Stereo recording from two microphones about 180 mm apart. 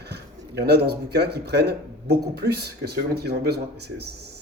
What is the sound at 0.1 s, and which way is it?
Speech, 65° right (ahead or behind).